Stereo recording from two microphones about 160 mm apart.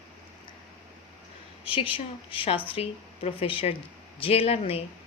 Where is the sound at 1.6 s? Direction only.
35° left (ahead or behind).